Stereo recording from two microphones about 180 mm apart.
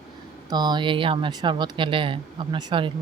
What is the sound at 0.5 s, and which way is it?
Speech, 25° right (ahead or behind).